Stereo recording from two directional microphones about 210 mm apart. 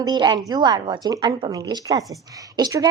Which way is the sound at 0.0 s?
20° right (ahead or behind).